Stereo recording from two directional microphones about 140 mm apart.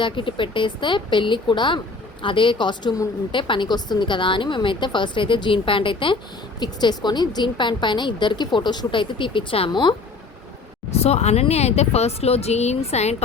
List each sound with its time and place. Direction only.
0.0 s a woman's voice: 35° left (ahead or behind)
10.9 s speech: 50° left (ahead or behind)